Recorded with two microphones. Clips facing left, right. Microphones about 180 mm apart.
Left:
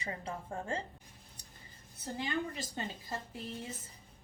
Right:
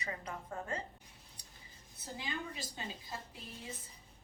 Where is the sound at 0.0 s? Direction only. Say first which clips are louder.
Left 2 dB; 30° left (ahead or behind).